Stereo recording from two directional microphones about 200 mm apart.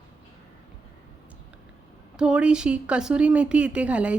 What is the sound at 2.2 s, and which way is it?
Speech, 5° right (ahead or behind).